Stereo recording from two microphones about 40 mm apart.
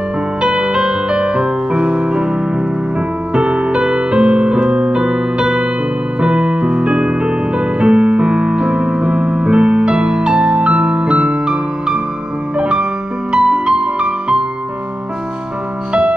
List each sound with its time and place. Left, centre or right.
0.4 s music: centre
3.3 s music: right
15.9 s music: right